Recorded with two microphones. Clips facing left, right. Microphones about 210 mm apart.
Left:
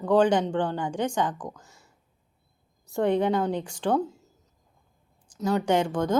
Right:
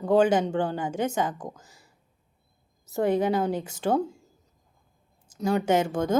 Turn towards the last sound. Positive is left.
turn(degrees=-10)  # may be behind; listen again after turning